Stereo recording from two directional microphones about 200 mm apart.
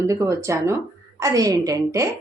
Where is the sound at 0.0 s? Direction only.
15° right (ahead or behind).